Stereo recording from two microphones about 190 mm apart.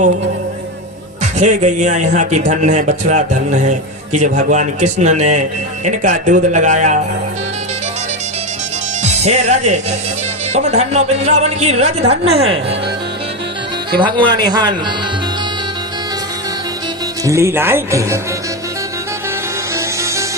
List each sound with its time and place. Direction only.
1.2 s a man's voice: 40° right (ahead or behind)
9.0 s a man's voice: 35° right (ahead or behind)
13.9 s speech: 25° right (ahead or behind)
17.2 s speech: 15° right (ahead or behind)
19.7 s music: 15° right (ahead or behind)